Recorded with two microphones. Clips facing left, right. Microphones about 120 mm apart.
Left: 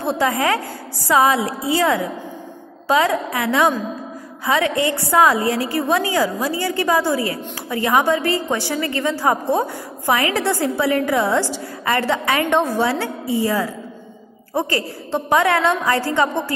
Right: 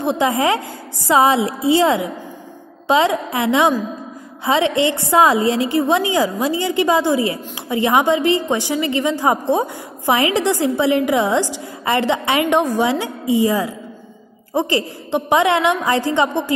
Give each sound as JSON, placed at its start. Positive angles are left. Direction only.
{"t": 0.0, "sound": "a woman's voice", "side_deg": -20}